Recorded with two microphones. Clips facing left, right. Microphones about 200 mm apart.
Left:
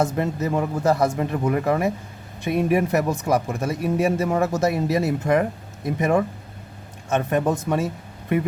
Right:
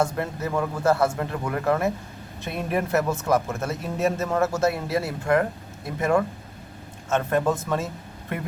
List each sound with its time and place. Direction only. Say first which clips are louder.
0.0 s speech: left 3 dB; 20° left (ahead or behind)